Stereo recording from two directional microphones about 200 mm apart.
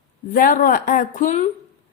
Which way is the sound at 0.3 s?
45° left (ahead or behind).